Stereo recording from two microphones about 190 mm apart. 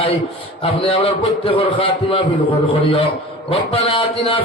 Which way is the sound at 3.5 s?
30° left (ahead or behind).